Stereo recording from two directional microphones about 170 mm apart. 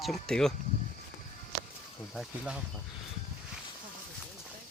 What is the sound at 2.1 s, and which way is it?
Speech, 5° right (ahead or behind).